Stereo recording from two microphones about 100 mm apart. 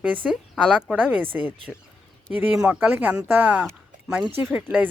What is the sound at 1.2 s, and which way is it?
Speech, 15° right (ahead or behind).